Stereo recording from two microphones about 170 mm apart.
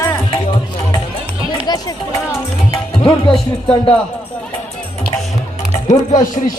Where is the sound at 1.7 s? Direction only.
20° left (ahead or behind).